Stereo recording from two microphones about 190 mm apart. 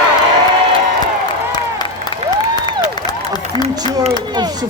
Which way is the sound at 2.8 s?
20° left (ahead or behind).